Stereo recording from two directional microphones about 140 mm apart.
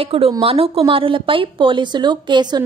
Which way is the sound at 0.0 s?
40° right (ahead or behind).